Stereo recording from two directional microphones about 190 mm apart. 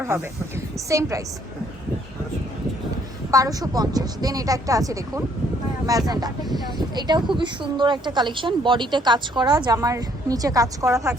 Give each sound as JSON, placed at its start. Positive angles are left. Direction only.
{"t": 0.0, "sound": "a woman's voice", "side_deg": -15}
{"t": 3.3, "sound": "a woman's voice", "side_deg": -20}